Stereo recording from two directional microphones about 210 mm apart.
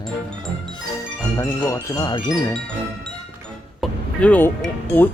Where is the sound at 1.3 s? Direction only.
15° left (ahead or behind).